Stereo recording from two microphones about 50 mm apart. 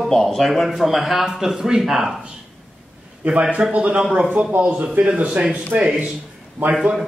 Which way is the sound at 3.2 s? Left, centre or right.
Right.